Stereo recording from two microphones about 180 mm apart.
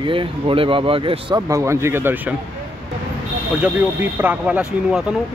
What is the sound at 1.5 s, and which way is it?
Speech, 15° right (ahead or behind).